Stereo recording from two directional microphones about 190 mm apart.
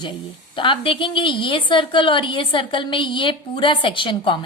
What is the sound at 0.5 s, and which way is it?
A woman's voice, 25° left (ahead or behind).